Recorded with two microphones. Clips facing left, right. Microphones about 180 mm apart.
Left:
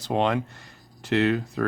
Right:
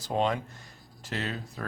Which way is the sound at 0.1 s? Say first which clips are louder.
Left 4 dB; 75° left (ahead or behind).